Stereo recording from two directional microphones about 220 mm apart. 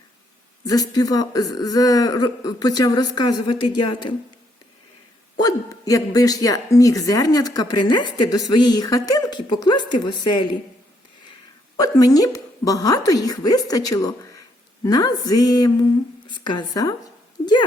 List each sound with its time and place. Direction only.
0.6 s speech: 15° left (ahead or behind)
5.4 s a woman's voice: 15° left (ahead or behind)
11.8 s a woman's voice: 15° left (ahead or behind)